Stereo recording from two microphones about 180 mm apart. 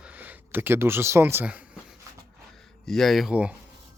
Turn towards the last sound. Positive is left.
turn(degrees=-5)  # may be behind; listen again after turning